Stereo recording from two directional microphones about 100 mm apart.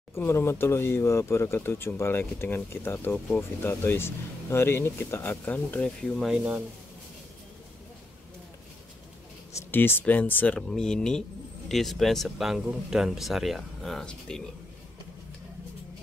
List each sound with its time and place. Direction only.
0.1 s speech: 25° left (ahead or behind)
6.2 s speech: 10° right (ahead or behind)
9.6 s speech: 20° left (ahead or behind)